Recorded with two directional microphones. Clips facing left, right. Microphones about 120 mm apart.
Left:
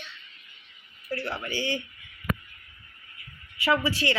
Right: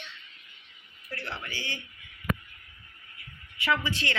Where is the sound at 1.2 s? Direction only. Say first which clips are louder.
Left 6 dB; 10° left (ahead or behind).